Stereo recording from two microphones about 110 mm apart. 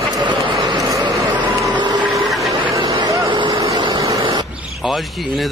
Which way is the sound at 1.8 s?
45° right (ahead or behind).